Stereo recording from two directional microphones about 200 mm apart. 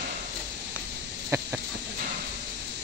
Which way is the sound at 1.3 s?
15° right (ahead or behind).